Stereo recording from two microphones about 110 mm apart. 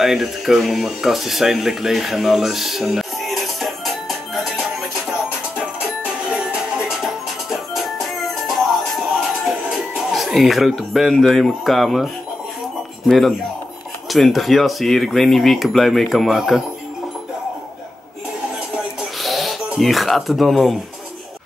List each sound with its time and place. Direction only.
0.0 s speech: 5° right (ahead or behind)
6.3 s music: centre (ahead or behind)
9.7 s speech: centre (ahead or behind)
18.9 s a sound: centre (ahead or behind)
19.8 s speech: centre (ahead or behind)